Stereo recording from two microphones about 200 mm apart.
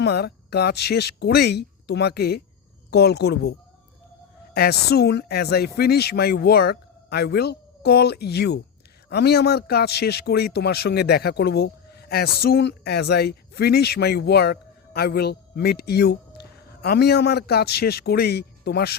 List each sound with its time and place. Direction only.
0.0 s speech: 55° left (ahead or behind)
4.5 s speech: 50° left (ahead or behind)